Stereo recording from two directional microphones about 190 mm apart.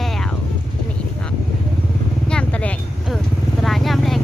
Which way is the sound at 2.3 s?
5° left (ahead or behind).